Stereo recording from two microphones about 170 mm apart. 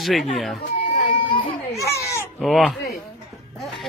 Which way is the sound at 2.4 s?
Centre (ahead or behind).